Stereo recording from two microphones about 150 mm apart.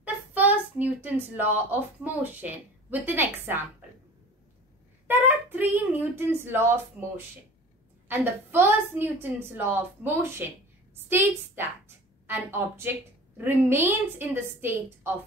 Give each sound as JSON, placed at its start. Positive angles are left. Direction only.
{"t": 0.0, "sound": "speech", "side_deg": -10}
{"t": 5.0, "sound": "a woman's voice", "side_deg": -15}